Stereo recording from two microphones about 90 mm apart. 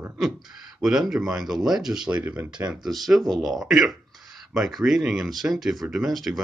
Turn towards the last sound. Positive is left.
turn(degrees=0)  # may be behind; listen again after turning